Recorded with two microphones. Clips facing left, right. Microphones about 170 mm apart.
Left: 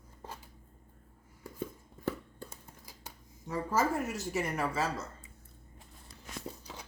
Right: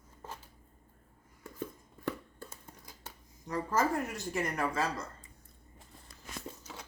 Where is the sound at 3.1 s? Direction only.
10° left (ahead or behind).